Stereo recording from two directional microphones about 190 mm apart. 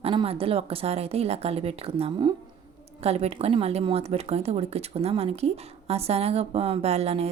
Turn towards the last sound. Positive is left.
turn(degrees=-35)  # may be behind; listen again after turning